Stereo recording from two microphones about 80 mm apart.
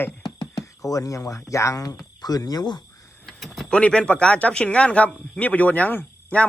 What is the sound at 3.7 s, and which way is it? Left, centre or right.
A man's voice, centre.